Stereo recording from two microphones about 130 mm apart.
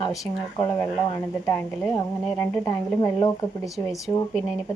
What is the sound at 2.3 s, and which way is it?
Speech, 20° left (ahead or behind).